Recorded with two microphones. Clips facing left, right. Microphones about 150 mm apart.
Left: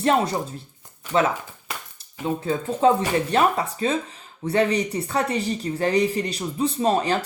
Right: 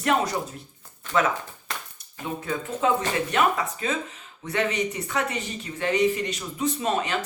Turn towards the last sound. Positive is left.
turn(degrees=35)  # may be behind; listen again after turning